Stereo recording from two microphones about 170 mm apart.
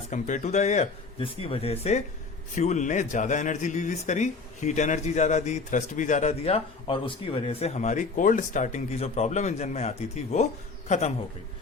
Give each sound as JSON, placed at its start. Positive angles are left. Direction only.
{"t": 0.1, "sound": "a man's voice", "side_deg": 45}